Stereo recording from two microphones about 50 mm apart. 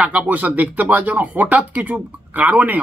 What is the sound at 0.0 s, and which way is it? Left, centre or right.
Speech, right.